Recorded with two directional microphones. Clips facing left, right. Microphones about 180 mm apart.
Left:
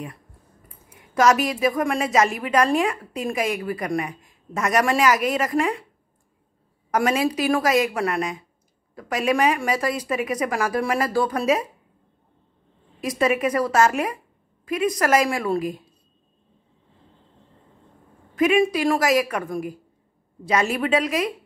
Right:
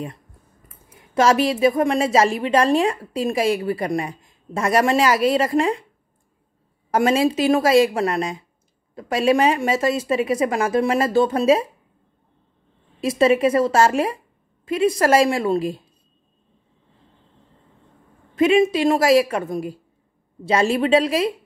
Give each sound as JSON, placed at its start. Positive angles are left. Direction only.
{"t": 1.1, "sound": "a woman's voice", "side_deg": -30}
{"t": 6.9, "sound": "a woman's voice", "side_deg": -30}
{"t": 13.0, "sound": "a woman's voice", "side_deg": -25}
{"t": 18.3, "sound": "a woman's voice", "side_deg": -25}